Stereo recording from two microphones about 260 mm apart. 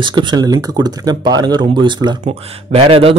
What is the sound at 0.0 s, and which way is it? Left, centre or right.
A man's voice, centre.